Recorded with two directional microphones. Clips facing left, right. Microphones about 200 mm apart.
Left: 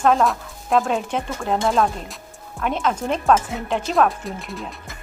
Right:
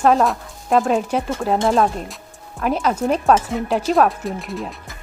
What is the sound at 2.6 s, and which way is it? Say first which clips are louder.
Speech: right 3 dB; 5° right (ahead or behind).